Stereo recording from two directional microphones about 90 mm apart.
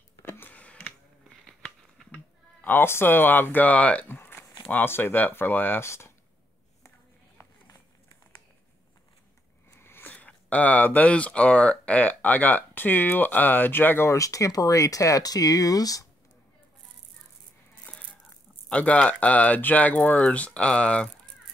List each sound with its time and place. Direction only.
0.2 s a sound: 25° left (ahead or behind)
4.6 s speech: 25° left (ahead or behind)
7.3 s run: 35° left (ahead or behind)
9.8 s speech: 25° left (ahead or behind); by 16.1 s 40° left (ahead or behind)
18.7 s speech: 15° left (ahead or behind)